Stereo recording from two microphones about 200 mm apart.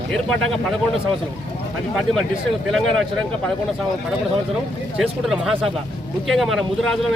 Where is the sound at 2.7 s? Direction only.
5° left (ahead or behind).